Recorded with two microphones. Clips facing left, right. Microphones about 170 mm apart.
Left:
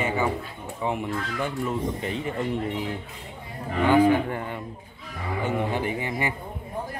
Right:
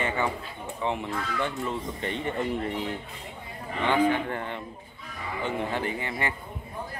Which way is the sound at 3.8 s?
10° left (ahead or behind).